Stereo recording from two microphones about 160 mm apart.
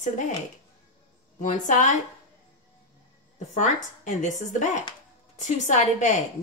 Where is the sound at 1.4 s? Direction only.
50° left (ahead or behind).